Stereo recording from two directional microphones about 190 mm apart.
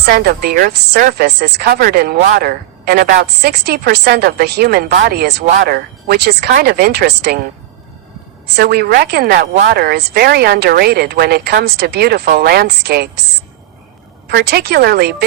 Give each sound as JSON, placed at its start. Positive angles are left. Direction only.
{"t": 0.0, "sound": "a woman's voice", "side_deg": -55}
{"t": 8.5, "sound": "a woman's voice", "side_deg": -55}
{"t": 14.3, "sound": "a woman's voice", "side_deg": -55}